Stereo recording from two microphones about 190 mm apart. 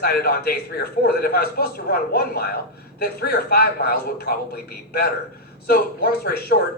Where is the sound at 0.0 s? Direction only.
55° left (ahead or behind).